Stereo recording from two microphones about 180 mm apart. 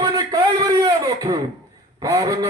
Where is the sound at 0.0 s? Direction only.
25° right (ahead or behind).